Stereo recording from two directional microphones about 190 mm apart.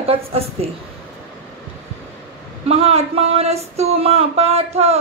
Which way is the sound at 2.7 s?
30° right (ahead or behind).